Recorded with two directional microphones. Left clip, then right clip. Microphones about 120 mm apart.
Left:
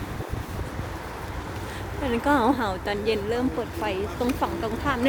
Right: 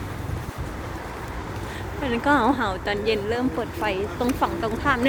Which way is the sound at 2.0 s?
35° left (ahead or behind).